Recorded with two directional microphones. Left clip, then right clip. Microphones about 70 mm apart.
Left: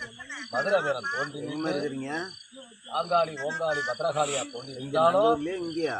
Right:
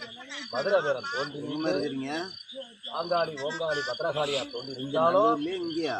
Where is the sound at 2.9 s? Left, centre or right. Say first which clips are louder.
Left 3 dB; left.